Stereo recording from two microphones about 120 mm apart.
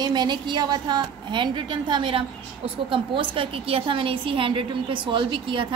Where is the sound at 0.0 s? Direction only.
35° right (ahead or behind).